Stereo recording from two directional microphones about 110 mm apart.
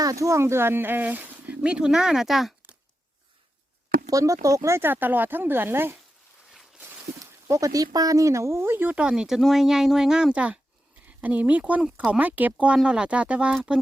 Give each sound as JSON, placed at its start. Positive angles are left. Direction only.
{"t": 0.0, "sound": "speech", "side_deg": -30}
{"t": 4.1, "sound": "speech", "side_deg": -30}
{"t": 7.3, "sound": "speech", "side_deg": -30}